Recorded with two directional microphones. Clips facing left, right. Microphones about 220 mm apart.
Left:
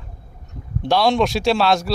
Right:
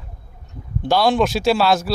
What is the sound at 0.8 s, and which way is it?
Speech, centre (ahead or behind).